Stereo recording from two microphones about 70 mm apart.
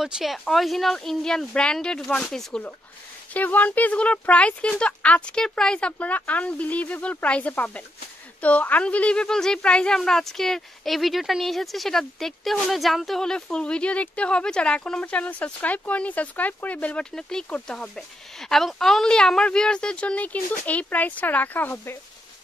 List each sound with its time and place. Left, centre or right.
0.0 s speech: centre
3.3 s speech: left
17.0 s speech: centre; by 21.9 s left